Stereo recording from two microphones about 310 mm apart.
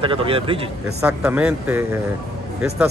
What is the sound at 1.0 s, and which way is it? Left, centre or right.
Speech, centre.